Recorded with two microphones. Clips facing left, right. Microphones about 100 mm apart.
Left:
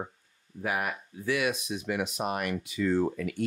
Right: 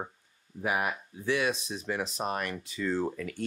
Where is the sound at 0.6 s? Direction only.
15° right (ahead or behind).